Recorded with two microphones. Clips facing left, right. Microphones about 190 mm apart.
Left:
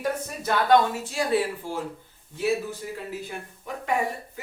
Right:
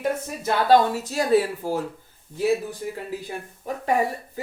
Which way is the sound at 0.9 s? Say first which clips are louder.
Right 4 dB; 40° right (ahead or behind).